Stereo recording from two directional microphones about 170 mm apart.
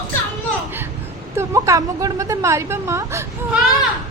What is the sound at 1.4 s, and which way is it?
A woman's voice, 20° right (ahead or behind).